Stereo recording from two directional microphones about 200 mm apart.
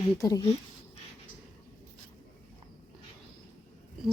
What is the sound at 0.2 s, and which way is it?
Speech, 15° left (ahead or behind).